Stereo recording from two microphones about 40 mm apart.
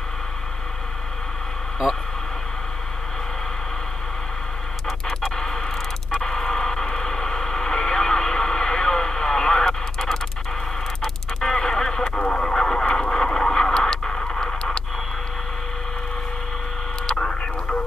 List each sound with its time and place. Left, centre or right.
5.0 s music: centre
6.2 s radio: centre
11.0 s a sound: centre
12.3 s radio: centre
12.9 s a sound: centre
17.0 s radio: centre